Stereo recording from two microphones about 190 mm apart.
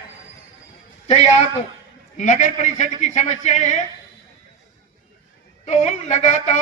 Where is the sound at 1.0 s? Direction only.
35° left (ahead or behind).